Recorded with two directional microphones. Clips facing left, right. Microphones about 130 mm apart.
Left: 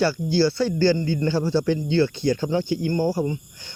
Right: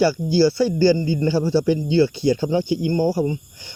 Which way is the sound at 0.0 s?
5° right (ahead or behind).